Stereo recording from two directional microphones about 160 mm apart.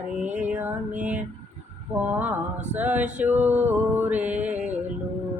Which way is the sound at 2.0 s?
10° right (ahead or behind).